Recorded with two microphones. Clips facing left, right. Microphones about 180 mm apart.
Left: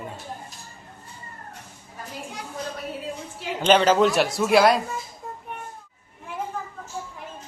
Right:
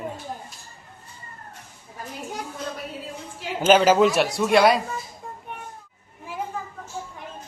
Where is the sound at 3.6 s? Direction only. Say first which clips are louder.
Right 1 dB; 5° right (ahead or behind).